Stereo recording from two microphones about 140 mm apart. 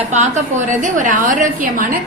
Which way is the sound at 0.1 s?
60° right (ahead or behind).